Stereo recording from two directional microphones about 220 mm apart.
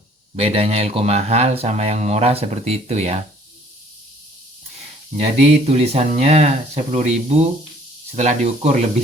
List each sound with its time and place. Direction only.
0.3 s speech: 25° right (ahead or behind)
5.4 s speech: 30° right (ahead or behind)